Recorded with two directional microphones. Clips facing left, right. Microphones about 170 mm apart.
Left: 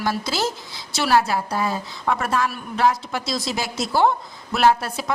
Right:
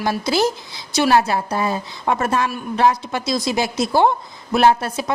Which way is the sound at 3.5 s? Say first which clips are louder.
Right 6 dB; 20° right (ahead or behind).